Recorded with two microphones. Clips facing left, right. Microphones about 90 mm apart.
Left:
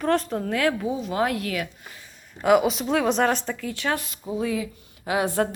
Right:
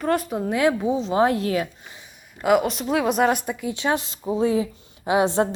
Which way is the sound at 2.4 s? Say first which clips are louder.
Even; centre (ahead or behind).